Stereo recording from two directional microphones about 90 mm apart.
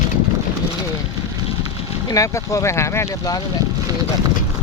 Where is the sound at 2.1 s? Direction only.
40° left (ahead or behind).